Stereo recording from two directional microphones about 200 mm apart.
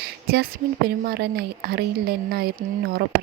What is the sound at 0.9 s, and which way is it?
Speech, 55° right (ahead or behind).